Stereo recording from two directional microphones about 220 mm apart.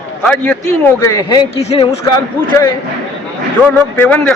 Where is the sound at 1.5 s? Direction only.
30° left (ahead or behind).